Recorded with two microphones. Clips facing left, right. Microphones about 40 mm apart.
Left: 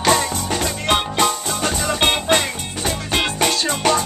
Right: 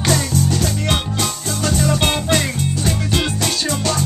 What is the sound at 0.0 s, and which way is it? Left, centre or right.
Music, left.